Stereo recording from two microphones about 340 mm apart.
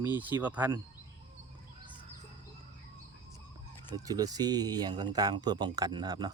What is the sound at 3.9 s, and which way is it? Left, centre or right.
Speech, centre.